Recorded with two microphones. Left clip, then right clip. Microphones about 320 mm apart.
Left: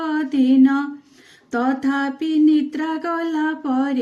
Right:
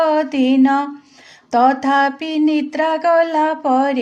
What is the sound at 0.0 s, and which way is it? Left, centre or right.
Mantra, centre.